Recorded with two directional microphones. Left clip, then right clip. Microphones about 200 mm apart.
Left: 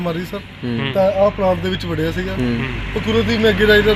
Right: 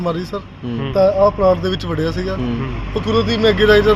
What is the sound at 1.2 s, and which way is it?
Speech, 10° right (ahead or behind).